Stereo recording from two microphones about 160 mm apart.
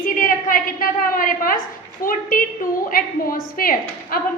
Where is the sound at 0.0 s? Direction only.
60° left (ahead or behind).